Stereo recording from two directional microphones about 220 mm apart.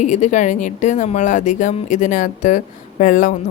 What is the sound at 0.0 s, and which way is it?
Speech, 30° left (ahead or behind).